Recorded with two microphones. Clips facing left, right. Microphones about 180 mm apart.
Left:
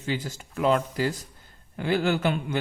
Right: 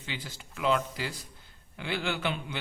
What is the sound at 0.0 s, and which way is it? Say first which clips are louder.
Speech: left 10 dB; 45° left (ahead or behind).